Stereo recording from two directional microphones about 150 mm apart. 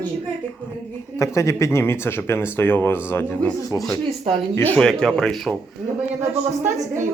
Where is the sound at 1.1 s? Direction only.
20° left (ahead or behind).